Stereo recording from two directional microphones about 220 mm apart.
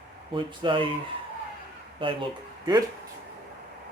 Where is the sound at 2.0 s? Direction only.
20° right (ahead or behind).